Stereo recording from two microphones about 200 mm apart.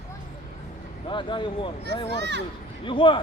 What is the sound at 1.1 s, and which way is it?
Speech, 25° left (ahead or behind).